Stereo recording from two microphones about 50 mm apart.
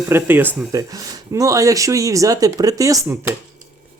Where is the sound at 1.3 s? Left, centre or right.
Right.